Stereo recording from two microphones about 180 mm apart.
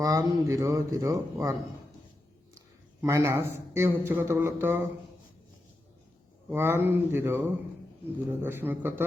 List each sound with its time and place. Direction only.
0.0 s a man's voice: 20° right (ahead or behind)
3.0 s a man's voice: 15° right (ahead or behind)
6.5 s a man's voice: 10° right (ahead or behind)